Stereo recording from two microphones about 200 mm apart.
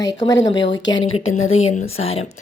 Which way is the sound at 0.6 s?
65° left (ahead or behind).